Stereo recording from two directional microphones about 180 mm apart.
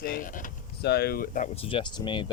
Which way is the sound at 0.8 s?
65° left (ahead or behind).